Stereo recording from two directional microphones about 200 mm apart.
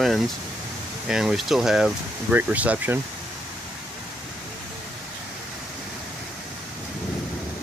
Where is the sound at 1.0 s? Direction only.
Centre (ahead or behind).